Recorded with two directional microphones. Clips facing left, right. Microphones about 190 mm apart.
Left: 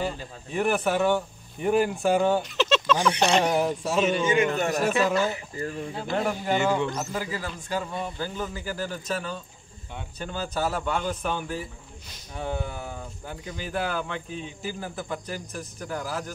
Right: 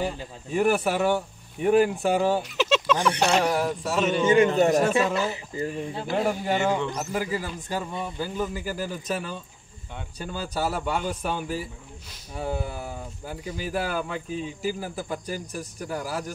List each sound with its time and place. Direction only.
0.0 s speech: 10° right (ahead or behind)
3.4 s a man's voice: 20° left (ahead or behind)
4.4 s a man's voice: 35° right (ahead or behind)
5.9 s speech: 5° right (ahead or behind)